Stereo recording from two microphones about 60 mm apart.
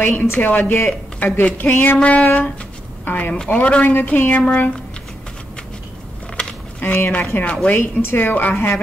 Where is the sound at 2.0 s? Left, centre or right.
Left.